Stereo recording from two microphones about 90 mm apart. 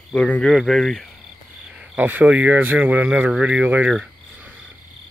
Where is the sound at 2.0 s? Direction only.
15° right (ahead or behind).